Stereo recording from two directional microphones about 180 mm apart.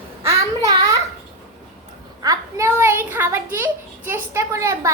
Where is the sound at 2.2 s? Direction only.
20° right (ahead or behind).